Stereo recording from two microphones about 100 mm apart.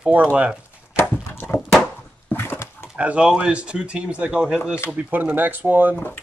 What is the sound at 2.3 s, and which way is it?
Dog, 25° left (ahead or behind).